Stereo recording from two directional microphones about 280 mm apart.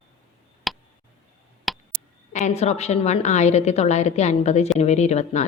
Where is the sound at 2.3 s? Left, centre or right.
Left.